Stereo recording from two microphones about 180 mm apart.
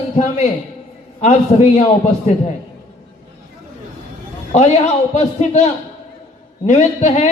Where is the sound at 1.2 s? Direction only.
40° left (ahead or behind).